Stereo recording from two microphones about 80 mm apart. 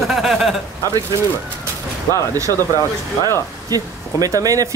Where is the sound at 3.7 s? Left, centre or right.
Right.